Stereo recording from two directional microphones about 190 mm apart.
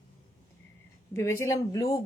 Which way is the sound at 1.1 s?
15° left (ahead or behind).